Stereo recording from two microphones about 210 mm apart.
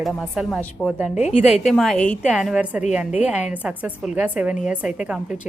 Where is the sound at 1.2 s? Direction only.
30° left (ahead or behind).